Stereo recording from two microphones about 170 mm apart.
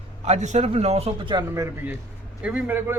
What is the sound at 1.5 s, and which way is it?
A man's voice, 15° right (ahead or behind).